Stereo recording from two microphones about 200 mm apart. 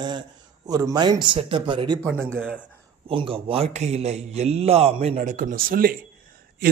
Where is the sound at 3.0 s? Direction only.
25° right (ahead or behind).